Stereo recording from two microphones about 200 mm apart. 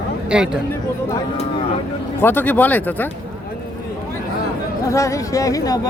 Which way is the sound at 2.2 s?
10° left (ahead or behind).